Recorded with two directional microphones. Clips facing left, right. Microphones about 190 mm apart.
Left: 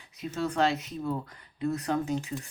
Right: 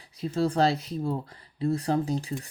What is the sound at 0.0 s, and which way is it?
Speech, 35° right (ahead or behind).